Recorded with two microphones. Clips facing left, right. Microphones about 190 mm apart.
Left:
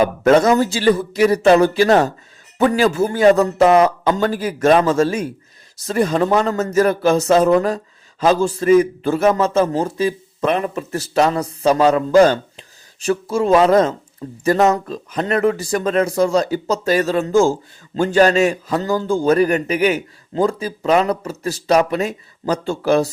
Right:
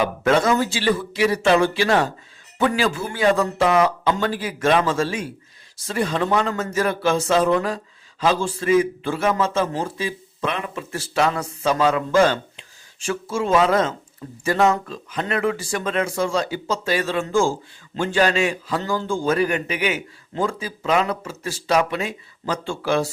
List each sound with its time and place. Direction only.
0.0 s a man's voice: 40° left (ahead or behind)